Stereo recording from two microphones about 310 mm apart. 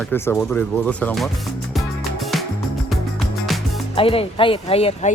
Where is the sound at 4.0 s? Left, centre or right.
Centre.